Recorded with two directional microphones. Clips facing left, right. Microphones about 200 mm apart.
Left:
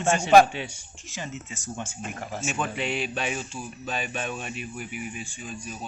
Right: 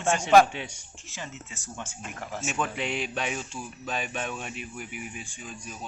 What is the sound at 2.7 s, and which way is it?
Speech, 5° left (ahead or behind).